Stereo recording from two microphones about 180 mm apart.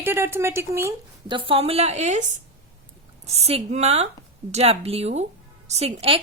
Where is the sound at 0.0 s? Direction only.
15° right (ahead or behind).